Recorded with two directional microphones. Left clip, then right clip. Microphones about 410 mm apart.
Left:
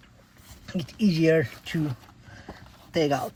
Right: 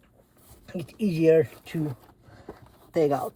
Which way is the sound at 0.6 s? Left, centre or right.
Left.